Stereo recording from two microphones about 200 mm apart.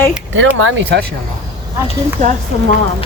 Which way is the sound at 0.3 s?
75° right (ahead or behind).